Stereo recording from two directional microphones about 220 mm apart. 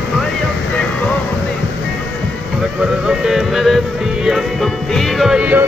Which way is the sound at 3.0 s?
Centre (ahead or behind).